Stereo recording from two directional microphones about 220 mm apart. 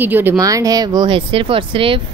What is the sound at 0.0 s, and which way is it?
Speech, 10° right (ahead or behind).